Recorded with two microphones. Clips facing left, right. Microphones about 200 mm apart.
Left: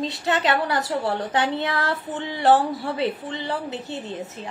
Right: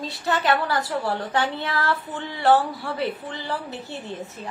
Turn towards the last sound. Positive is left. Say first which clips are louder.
# left 2 dB
turn(degrees=20)  # may be behind; listen again after turning